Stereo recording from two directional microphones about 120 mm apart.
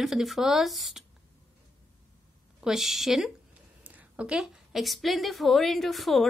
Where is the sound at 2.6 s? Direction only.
5° right (ahead or behind).